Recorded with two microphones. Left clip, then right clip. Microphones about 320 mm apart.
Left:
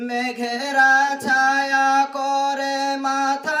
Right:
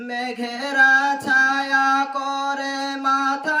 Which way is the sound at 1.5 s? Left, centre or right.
Centre.